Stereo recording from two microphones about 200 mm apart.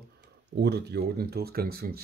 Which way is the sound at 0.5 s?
55° right (ahead or behind).